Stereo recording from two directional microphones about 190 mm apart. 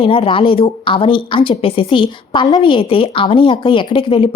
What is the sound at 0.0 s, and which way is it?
A woman's voice, 30° left (ahead or behind).